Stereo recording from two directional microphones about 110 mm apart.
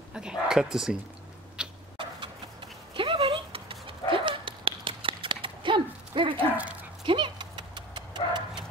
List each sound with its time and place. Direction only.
0.1 s speech: 5° right (ahead or behind)
1.6 s a sound: 10° right (ahead or behind)
2.9 s dog: 55° right (ahead or behind)
4.1 s a sound: 50° right (ahead or behind)
6.5 s dog: 15° right (ahead or behind)
7.1 s dog: 45° right (ahead or behind)